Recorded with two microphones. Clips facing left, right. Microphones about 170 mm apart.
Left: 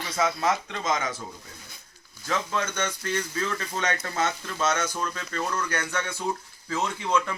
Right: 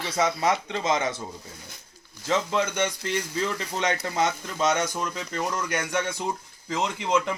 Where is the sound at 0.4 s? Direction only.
20° right (ahead or behind).